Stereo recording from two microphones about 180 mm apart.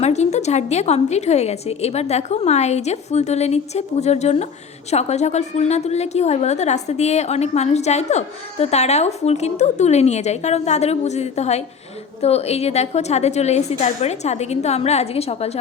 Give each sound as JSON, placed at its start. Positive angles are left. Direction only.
{"t": 0.0, "sound": "a woman's voice", "side_deg": 40}